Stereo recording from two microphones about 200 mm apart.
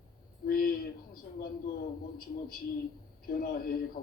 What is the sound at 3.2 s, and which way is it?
Speech, 45° left (ahead or behind).